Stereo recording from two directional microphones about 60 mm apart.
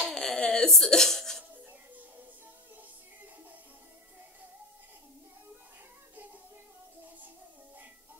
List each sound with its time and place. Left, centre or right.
0.0 s a sound: centre
0.4 s hiccup: centre
1.7 s music: right